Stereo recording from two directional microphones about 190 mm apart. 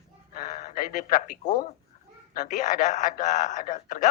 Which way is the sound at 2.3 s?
45° left (ahead or behind).